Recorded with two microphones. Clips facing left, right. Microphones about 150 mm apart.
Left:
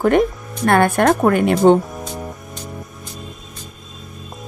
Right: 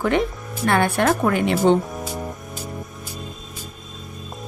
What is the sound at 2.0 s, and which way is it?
Music, 5° right (ahead or behind).